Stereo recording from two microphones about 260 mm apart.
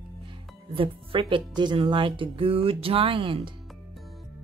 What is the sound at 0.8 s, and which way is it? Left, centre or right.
Speech, centre.